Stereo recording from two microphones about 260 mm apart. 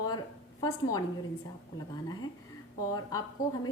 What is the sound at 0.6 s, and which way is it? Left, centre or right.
Speech, centre.